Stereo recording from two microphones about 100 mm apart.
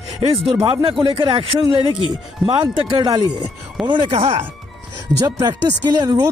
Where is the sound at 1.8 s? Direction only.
50° left (ahead or behind).